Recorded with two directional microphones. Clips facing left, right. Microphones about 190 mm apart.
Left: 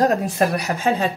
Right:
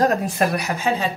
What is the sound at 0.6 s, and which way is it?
Speech, 45° left (ahead or behind).